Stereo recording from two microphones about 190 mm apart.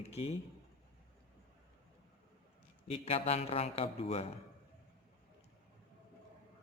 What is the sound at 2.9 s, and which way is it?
A man's voice, 30° left (ahead or behind).